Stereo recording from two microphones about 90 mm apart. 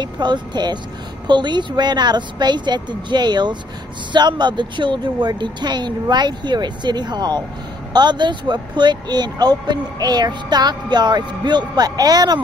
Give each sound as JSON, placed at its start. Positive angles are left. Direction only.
{"t": 0.0, "sound": "speech", "side_deg": -55}